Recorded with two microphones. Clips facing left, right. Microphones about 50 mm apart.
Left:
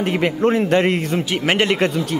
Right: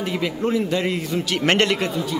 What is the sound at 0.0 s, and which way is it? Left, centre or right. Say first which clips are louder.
A man's voice: left 6 dB; left.